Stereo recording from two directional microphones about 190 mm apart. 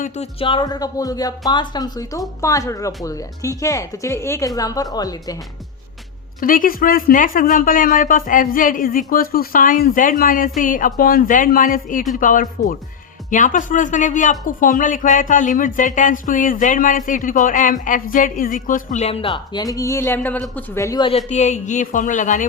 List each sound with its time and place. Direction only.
0.0 s speech: 30° left (ahead or behind)
6.4 s speech: 45° left (ahead or behind); by 21.1 s 20° left (ahead or behind)
21.2 s speech: 35° left (ahead or behind)